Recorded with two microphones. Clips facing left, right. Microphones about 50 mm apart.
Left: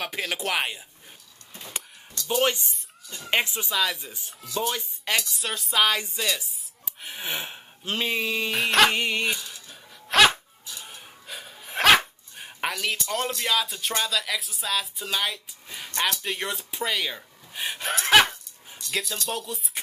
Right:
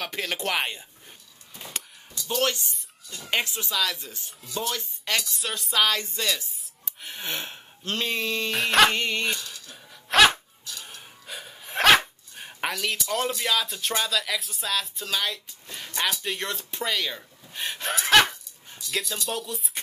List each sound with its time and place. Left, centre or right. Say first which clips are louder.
0.0 s speech: even; centre
2.2 s speech: left 2 dB; centre
10.7 s breathing: right 1 dB; centre
11.2 s dog: even; centre
13.5 s speech: even; centre
16.2 s gasp: left 1 dB; centre
18.1 s dog: left 1 dB; centre
18.9 s speech: even; centre